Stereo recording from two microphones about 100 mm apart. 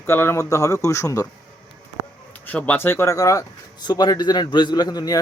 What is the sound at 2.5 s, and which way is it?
A man's voice, 15° left (ahead or behind).